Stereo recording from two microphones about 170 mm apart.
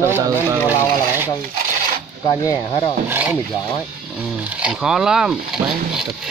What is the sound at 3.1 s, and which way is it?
Speech, 10° right (ahead or behind).